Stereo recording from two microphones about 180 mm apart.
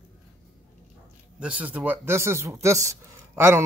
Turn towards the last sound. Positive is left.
turn(degrees=-15)  # may be behind; listen again after turning